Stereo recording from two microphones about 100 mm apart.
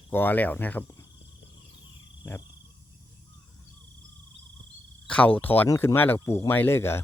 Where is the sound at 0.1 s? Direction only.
20° left (ahead or behind).